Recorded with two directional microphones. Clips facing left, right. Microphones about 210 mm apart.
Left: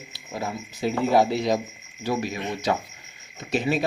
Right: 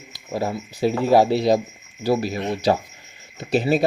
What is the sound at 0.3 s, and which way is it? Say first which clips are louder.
Speech: right 6 dB; 35° right (ahead or behind).